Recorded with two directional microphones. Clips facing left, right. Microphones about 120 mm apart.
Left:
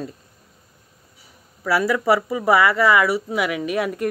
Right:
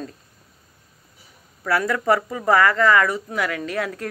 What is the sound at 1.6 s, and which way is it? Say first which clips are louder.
Speech: left 2 dB; 5° left (ahead or behind).